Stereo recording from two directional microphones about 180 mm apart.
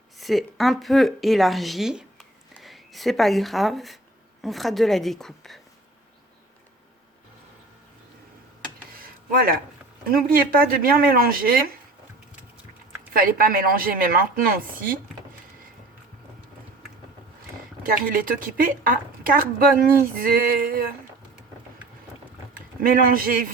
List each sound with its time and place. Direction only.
0.2 s speech: centre (ahead or behind)
8.9 s a sound: 55° right (ahead or behind)
10.1 s speech: 55° right (ahead or behind)
13.1 s a woman's voice: 50° right (ahead or behind)
17.8 s a woman's voice: 50° right (ahead or behind)
22.8 s a woman's voice: 50° right (ahead or behind)